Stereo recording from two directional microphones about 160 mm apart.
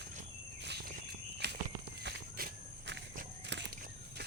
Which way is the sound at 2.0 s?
90° right.